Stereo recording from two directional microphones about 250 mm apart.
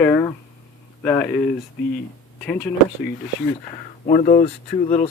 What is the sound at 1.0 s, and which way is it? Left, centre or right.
Speech, centre.